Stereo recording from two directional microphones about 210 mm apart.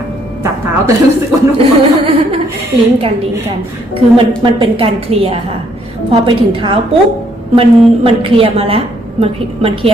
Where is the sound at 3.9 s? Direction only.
25° right (ahead or behind).